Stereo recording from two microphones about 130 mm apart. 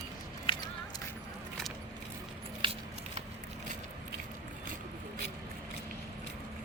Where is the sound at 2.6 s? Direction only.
40° right (ahead or behind).